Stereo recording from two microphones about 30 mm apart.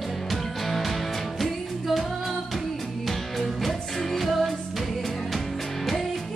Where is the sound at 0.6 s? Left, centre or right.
Centre.